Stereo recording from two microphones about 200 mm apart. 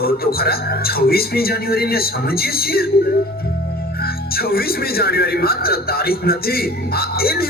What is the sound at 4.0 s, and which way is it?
Speech, 50° left (ahead or behind).